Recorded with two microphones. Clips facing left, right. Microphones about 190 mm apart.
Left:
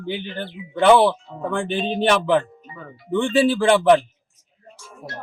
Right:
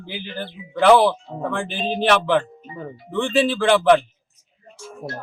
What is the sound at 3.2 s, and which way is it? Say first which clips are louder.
Speech: left 1 dB; centre (ahead or behind).